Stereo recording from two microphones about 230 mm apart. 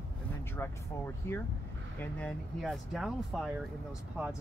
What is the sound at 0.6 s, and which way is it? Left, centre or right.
Speech, centre.